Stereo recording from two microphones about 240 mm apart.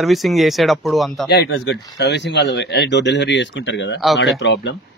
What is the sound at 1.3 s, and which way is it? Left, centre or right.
Speech, left.